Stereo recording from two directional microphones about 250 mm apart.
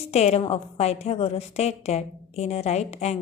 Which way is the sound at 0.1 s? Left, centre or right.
Left.